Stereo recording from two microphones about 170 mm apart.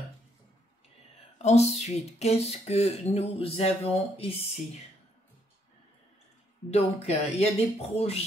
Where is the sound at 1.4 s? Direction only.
40° left (ahead or behind).